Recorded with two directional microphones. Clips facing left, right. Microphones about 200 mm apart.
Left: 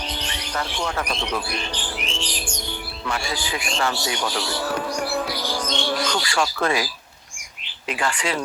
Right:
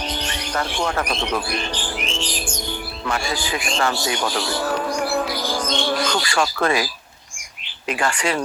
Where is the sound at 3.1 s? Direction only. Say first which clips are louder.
Right 3 dB; 50° right (ahead or behind).